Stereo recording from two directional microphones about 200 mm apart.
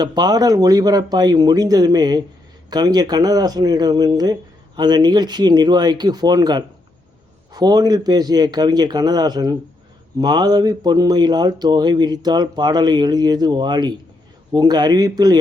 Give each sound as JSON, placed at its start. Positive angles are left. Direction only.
{"t": 0.0, "sound": "speech", "side_deg": -20}